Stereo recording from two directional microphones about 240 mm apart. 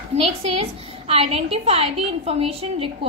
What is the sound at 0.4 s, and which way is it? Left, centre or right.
A woman's voice, right.